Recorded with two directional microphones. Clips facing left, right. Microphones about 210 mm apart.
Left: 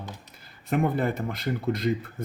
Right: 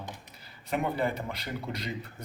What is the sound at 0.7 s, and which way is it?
Speech, 50° left (ahead or behind).